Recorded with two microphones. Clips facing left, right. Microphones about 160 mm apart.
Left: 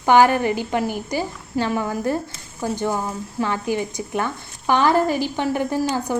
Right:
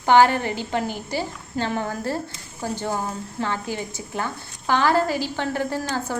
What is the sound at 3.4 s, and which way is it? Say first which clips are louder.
Speech: left 5 dB; 15° left (ahead or behind).